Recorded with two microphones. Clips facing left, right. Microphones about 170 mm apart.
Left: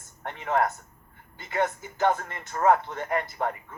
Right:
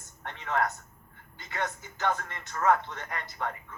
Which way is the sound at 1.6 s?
45° left (ahead or behind).